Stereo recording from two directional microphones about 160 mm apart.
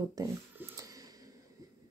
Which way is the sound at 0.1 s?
20° right (ahead or behind).